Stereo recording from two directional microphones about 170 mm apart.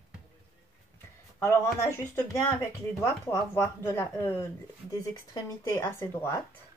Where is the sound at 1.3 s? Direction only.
15° left (ahead or behind).